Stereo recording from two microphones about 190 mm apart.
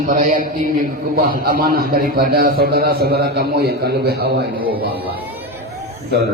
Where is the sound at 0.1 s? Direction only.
45° right (ahead or behind).